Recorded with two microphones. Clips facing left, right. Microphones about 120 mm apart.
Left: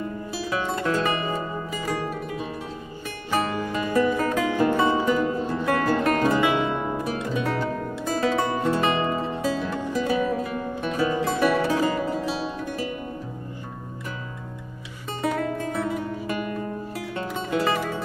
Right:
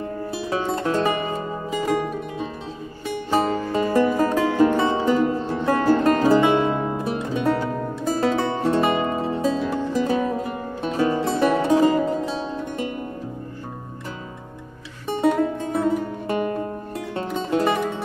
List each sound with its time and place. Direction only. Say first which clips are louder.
0.3 s music: right 3 dB; 25° right (ahead or behind)
3.7 s music: right 3 dB; 30° right (ahead or behind)
15.1 s music: right 6 dB; 25° right (ahead or behind)